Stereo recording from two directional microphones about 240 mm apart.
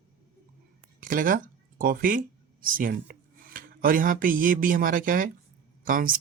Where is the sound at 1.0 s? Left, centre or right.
Right.